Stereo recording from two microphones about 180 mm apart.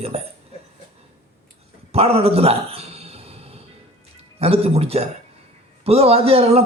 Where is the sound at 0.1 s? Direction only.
35° right (ahead or behind).